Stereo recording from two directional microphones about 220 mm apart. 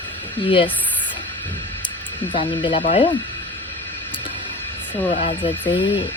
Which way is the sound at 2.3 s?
25° left (ahead or behind).